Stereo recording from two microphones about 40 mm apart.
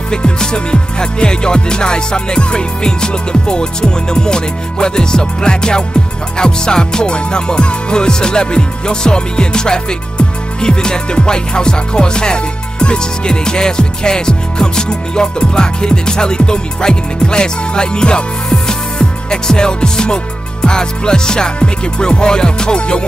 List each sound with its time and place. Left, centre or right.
0.1 s music: left